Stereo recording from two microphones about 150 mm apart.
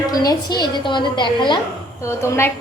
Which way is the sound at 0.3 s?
30° left (ahead or behind).